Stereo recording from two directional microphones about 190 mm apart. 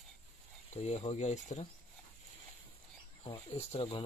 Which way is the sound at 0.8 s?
35° left (ahead or behind).